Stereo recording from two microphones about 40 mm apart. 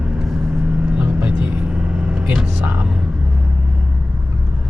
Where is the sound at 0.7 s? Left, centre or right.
Right.